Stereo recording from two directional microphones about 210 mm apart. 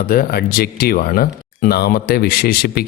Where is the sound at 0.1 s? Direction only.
45° left (ahead or behind).